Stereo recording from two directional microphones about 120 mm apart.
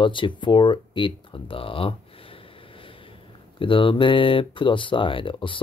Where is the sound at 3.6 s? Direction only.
45° left (ahead or behind).